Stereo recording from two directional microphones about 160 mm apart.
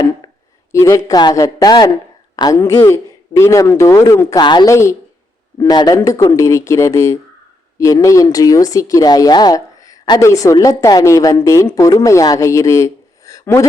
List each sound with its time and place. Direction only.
0.7 s speech: 20° left (ahead or behind)